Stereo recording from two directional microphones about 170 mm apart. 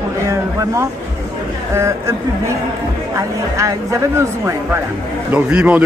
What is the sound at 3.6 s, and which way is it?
A man's voice, 15° right (ahead or behind).